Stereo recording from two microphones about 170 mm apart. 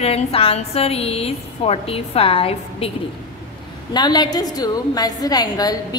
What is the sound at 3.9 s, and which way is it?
A woman's voice, 25° left (ahead or behind).